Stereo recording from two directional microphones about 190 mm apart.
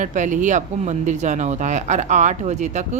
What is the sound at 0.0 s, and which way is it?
Speech, 40° right (ahead or behind).